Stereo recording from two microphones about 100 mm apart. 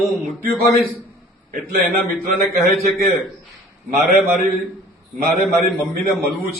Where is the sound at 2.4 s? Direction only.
Centre (ahead or behind).